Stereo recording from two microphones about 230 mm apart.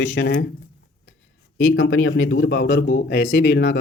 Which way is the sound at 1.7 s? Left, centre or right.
Left.